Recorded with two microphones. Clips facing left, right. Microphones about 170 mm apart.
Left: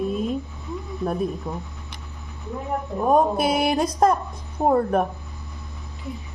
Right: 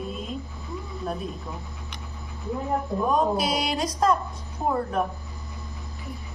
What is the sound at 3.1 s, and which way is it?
Speech, 55° left (ahead or behind).